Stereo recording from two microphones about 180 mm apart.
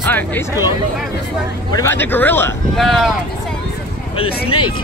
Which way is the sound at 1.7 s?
15° left (ahead or behind).